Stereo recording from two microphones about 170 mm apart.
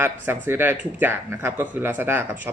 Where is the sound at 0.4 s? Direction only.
10° right (ahead or behind).